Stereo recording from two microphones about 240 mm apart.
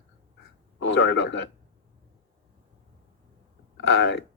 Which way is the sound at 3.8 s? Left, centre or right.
Left.